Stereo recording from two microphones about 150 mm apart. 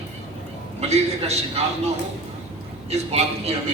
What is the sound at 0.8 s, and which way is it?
Speech, 45° right (ahead or behind).